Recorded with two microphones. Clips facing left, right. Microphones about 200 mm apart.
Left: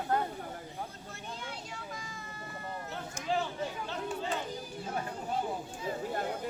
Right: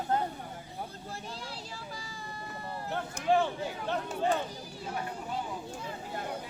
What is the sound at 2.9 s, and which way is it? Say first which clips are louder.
Speech: right 8 dB; 60° right (ahead or behind).